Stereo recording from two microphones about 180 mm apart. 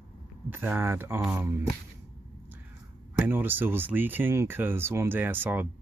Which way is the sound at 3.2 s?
10° right (ahead or behind).